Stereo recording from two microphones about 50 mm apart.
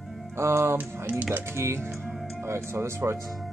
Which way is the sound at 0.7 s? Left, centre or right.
Right.